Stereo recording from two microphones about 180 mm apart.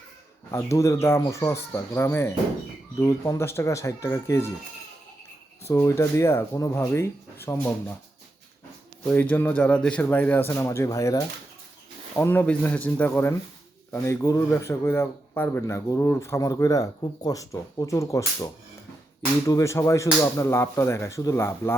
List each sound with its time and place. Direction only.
0.5 s speech: 15° left (ahead or behind)
5.6 s speech: 15° left (ahead or behind)
9.0 s speech: 10° left (ahead or behind)